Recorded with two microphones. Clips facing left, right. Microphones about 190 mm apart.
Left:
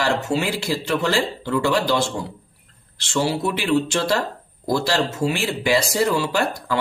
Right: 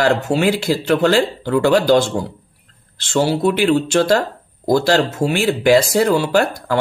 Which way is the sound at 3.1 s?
50° right (ahead or behind).